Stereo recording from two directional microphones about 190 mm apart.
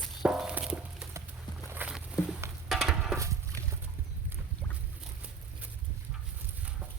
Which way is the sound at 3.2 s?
15° right (ahead or behind).